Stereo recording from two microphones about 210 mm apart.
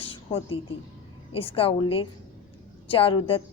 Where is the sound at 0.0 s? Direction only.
25° left (ahead or behind).